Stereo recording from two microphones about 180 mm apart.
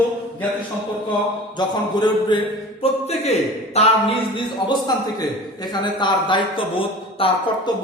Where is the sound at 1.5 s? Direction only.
25° left (ahead or behind).